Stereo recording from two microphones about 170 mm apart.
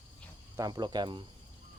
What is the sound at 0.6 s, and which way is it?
Speech, 25° right (ahead or behind).